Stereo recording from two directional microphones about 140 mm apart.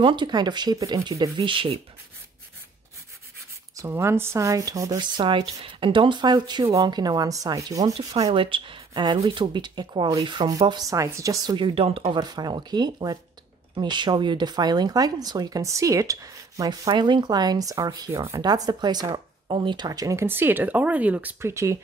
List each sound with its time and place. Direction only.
0.0 s speech: 35° right (ahead or behind)
3.7 s speech: 20° right (ahead or behind)
8.1 s speech: 40° right (ahead or behind); by 11.3 s 20° right (ahead or behind)
11.4 s speech: 35° right (ahead or behind)
12.2 s speech: 30° right (ahead or behind)